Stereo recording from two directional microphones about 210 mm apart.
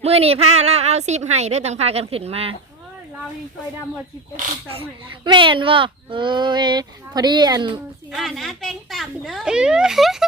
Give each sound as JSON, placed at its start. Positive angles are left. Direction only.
{"t": 0.0, "sound": "a woman's voice", "side_deg": -30}
{"t": 4.7, "sound": "speech", "side_deg": -25}
{"t": 8.1, "sound": "a child's voice", "side_deg": 0}